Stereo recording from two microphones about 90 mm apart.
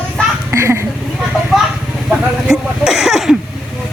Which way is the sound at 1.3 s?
10° right (ahead or behind).